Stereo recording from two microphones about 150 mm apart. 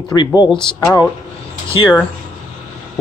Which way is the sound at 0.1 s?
20° left (ahead or behind).